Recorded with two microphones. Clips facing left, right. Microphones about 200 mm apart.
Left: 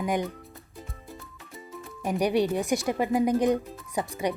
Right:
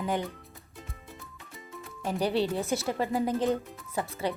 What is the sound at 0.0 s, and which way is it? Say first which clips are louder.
Speech: left 3 dB; 15° left (ahead or behind).